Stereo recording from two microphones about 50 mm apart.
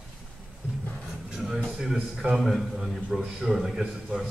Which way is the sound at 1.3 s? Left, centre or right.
Centre.